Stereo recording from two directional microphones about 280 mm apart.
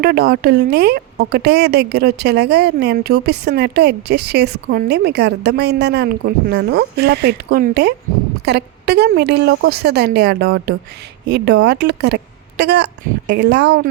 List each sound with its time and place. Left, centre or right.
0.0 s speech: right